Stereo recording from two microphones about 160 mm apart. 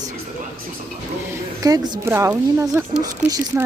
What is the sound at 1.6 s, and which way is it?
A woman's voice, 20° right (ahead or behind).